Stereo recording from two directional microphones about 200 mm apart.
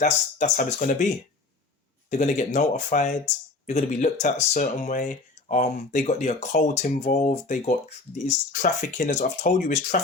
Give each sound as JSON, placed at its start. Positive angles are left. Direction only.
{"t": 0.0, "sound": "speech", "side_deg": 40}
{"t": 2.0, "sound": "speech", "side_deg": 40}